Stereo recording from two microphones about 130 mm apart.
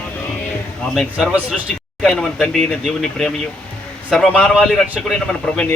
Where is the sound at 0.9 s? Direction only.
Centre (ahead or behind).